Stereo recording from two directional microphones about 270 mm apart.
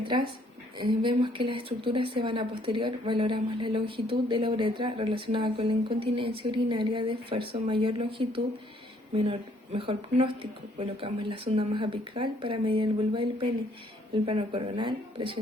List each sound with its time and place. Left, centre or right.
0.0 s a woman's voice: centre